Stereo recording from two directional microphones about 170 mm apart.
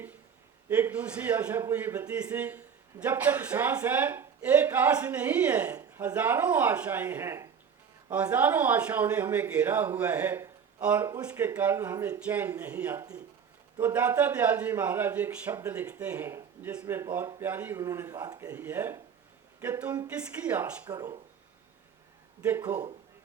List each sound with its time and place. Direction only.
0.7 s a man's voice: 10° right (ahead or behind)
18.5 s a man's voice: 10° right (ahead or behind)
20.9 s speech: 20° right (ahead or behind)
22.4 s a man's voice: 10° right (ahead or behind)